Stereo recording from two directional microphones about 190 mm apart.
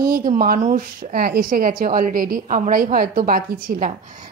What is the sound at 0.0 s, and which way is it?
A woman's voice, 50° right (ahead or behind).